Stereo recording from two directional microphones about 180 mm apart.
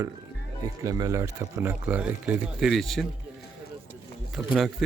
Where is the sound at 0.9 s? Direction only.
20° right (ahead or behind); by 3.1 s centre (ahead or behind).